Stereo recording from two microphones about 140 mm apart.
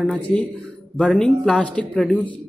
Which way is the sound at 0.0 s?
10° left (ahead or behind).